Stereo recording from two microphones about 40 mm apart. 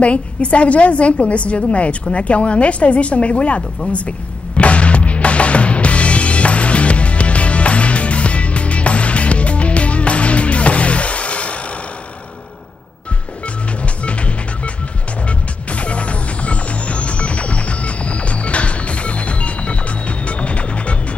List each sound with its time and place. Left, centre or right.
0.0 s a woman's voice: left
4.6 s music: left
13.8 s music: left